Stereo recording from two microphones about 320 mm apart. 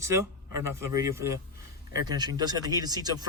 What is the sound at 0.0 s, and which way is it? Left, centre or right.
Speech, centre.